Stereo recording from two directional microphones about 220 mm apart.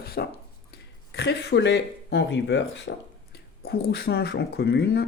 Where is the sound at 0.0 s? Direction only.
45° left (ahead or behind).